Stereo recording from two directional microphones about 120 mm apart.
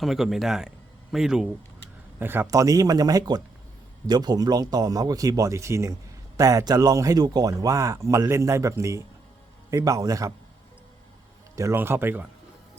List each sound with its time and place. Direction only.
0.0 s a man's voice: centre (ahead or behind)
2.1 s speech: 15° right (ahead or behind)
11.5 s a man's voice: 25° right (ahead or behind)